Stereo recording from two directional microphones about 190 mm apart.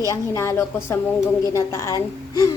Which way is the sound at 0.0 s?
15° left (ahead or behind).